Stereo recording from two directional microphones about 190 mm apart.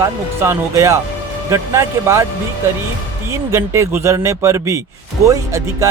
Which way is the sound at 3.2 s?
15° right (ahead or behind).